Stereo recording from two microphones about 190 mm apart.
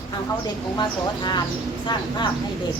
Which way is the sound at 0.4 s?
25° left (ahead or behind).